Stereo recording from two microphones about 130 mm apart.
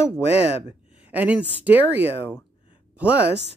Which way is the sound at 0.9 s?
10° right (ahead or behind).